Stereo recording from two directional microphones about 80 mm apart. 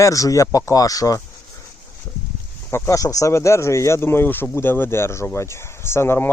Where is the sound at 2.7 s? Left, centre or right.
Left.